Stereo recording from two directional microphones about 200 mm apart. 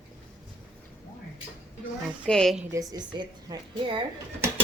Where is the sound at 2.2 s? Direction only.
5° left (ahead or behind).